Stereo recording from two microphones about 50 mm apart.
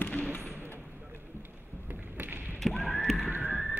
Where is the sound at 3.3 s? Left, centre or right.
Right.